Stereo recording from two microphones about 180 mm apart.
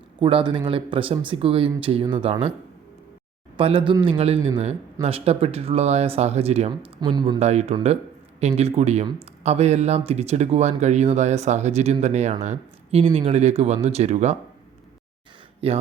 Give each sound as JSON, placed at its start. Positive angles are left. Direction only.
{"t": 0.2, "sound": "speech", "side_deg": -30}
{"t": 3.6, "sound": "speech", "side_deg": -30}
{"t": 7.3, "sound": "speech", "side_deg": -35}
{"t": 15.6, "sound": "speech", "side_deg": -30}